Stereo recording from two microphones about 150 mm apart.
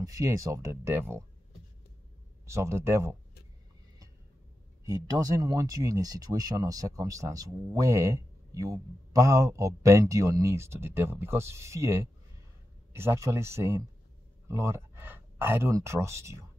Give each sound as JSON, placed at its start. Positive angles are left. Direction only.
{"t": 0.0, "sound": "speech", "side_deg": -20}
{"t": 2.4, "sound": "speech", "side_deg": -20}
{"t": 4.8, "sound": "speech", "side_deg": -25}